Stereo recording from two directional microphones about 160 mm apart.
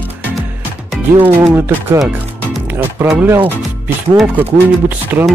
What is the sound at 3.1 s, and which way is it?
Speech, 10° right (ahead or behind).